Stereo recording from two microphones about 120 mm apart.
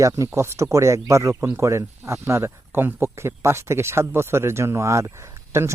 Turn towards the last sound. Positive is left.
turn(degrees=-25)  # may be behind; listen again after turning